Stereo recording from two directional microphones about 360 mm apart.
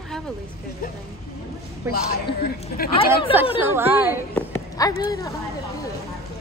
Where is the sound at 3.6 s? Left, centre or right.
Centre.